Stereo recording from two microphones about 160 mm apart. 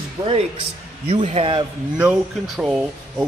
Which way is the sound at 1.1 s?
45° right (ahead or behind).